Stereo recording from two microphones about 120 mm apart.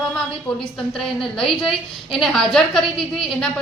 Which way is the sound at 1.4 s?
Centre (ahead or behind).